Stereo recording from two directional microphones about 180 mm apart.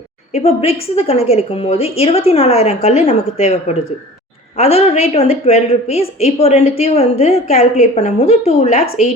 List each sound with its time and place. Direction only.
0.3 s a woman's voice: 35° left (ahead or behind)